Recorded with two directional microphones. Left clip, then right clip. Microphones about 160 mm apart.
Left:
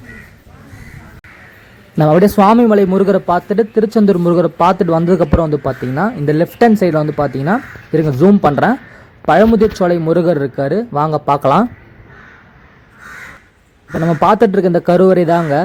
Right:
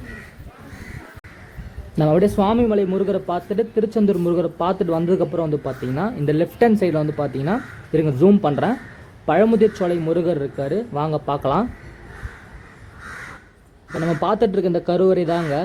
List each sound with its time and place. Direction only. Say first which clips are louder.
2.0 s a man's voice: left 7 dB; 45° left (ahead or behind)
14.0 s a man's voice: left 8 dB; 45° left (ahead or behind)